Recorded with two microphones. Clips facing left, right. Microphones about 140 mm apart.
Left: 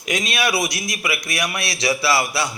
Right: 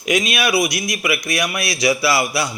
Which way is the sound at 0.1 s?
15° right (ahead or behind).